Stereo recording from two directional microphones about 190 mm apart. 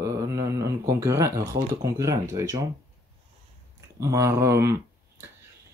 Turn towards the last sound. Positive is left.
turn(degrees=-15)  # may be behind; listen again after turning